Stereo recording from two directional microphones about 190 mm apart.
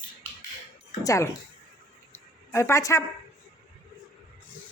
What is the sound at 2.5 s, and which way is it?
Speech, 15° left (ahead or behind).